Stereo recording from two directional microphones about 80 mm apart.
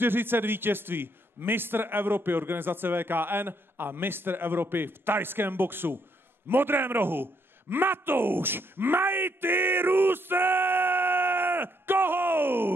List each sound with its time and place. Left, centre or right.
0.0 s a man's voice: right
7.7 s groan: right